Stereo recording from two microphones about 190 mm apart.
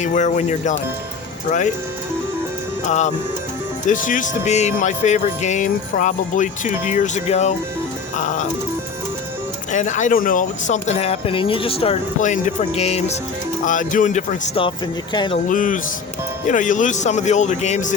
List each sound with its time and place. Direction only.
0.0 s speech: 40° left (ahead or behind)
2.8 s speech: 40° left (ahead or behind)
9.7 s speech: 40° left (ahead or behind)
15.1 s speech: 25° left (ahead or behind)
15.4 s speech: 45° left (ahead or behind)